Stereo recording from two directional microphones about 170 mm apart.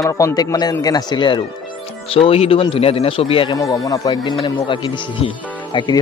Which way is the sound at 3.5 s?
20° left (ahead or behind).